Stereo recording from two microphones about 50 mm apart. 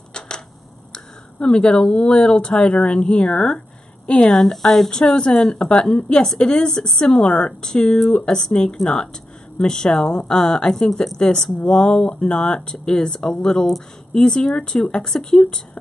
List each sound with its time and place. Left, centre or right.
0.9 s speech: centre
4.3 s speech: centre
13.7 s speech: centre
14.2 s speech: centre